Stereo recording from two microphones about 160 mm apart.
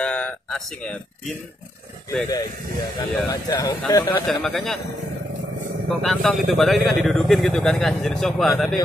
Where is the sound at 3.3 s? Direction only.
25° left (ahead or behind).